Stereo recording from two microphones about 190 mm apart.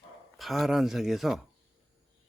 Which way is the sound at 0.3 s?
Centre (ahead or behind).